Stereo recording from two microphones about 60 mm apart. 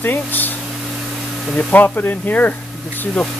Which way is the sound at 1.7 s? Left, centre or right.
Left.